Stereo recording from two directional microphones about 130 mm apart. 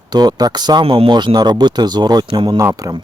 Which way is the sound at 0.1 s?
30° right (ahead or behind).